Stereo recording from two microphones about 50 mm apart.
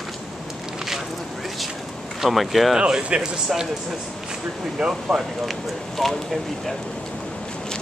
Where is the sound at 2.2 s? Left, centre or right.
Centre.